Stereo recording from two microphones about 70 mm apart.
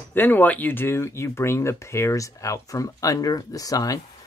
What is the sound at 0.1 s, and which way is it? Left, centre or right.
Speech, left.